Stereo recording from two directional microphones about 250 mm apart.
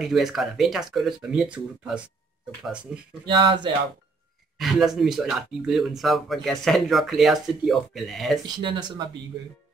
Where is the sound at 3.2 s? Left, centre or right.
Centre.